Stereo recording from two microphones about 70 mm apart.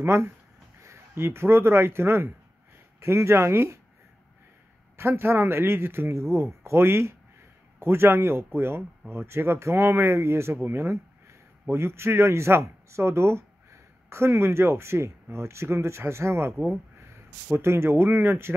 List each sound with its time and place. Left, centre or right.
0.0 s speech: right
4.9 s speech: right